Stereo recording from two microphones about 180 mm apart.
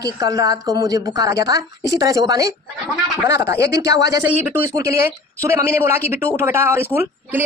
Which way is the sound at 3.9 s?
70° left (ahead or behind).